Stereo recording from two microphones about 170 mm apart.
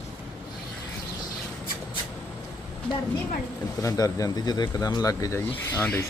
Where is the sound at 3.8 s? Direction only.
20° left (ahead or behind).